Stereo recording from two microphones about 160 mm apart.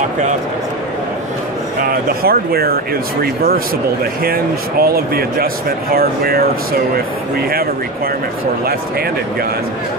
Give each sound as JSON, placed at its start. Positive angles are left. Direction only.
{"t": 1.8, "sound": "speech", "side_deg": -70}